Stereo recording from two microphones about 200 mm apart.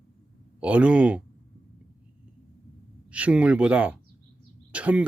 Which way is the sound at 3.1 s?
5° right (ahead or behind).